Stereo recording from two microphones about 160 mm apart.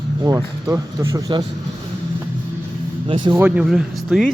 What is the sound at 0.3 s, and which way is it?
Speech, 20° right (ahead or behind).